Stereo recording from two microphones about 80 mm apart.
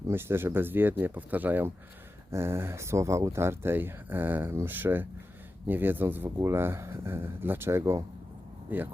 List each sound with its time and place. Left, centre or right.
0.1 s speech: right